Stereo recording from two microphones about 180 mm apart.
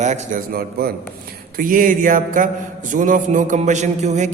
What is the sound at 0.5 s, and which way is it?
Speech, 60° right (ahead or behind).